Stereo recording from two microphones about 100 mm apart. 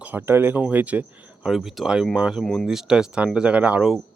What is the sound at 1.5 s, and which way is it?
Speech, centre (ahead or behind).